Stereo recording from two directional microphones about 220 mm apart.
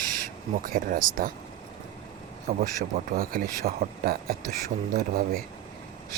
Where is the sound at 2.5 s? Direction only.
30° right (ahead or behind).